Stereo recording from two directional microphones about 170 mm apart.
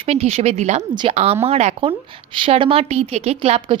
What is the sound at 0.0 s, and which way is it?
A woman's voice, 35° right (ahead or behind).